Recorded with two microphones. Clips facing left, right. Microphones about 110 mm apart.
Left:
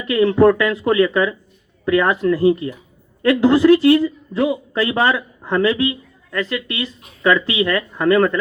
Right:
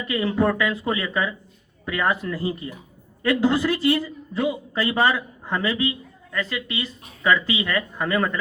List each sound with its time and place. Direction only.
0.1 s speech: 85° left
1.8 s a woman's voice: 90° left; by 3.9 s 70° left (ahead or behind)
4.4 s a man's voice: 90° left
6.3 s speech: 90° left